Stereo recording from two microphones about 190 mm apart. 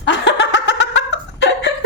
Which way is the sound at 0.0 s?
75° left (ahead or behind).